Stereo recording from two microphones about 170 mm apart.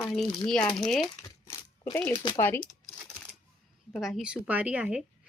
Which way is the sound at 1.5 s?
15° left (ahead or behind).